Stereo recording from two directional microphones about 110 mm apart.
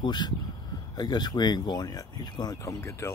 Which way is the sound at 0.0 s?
40° left (ahead or behind).